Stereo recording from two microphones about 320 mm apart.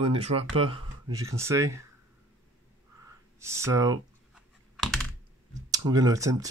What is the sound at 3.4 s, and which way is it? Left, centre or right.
Computer keyboard, centre.